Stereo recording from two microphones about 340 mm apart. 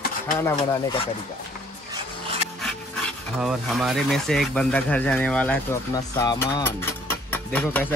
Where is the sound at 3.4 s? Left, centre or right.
Centre.